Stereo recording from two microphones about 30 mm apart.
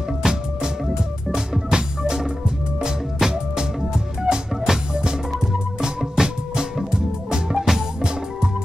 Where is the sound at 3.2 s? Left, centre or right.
Centre.